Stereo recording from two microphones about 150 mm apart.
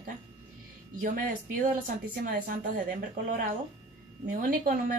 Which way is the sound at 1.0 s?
65° right (ahead or behind).